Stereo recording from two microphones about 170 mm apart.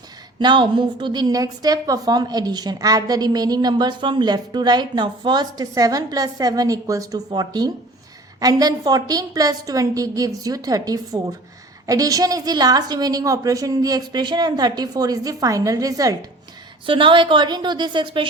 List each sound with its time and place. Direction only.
0.3 s a woman's voice: 25° right (ahead or behind)